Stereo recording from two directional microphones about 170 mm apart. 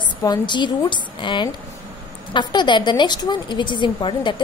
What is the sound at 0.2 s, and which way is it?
A woman's voice, 25° left (ahead or behind).